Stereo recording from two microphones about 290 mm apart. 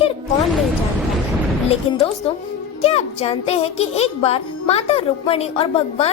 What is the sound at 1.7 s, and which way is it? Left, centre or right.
Speech, centre.